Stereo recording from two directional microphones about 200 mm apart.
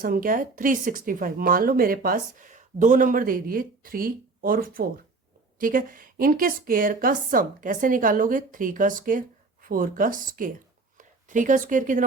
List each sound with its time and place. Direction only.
0.0 s a woman's voice: 45° right (ahead or behind)